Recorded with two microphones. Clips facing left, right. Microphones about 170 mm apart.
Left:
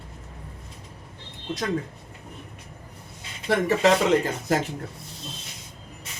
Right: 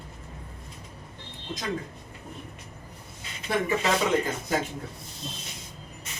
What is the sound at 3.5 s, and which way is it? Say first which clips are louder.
Speech: left 6 dB; 70° left (ahead or behind).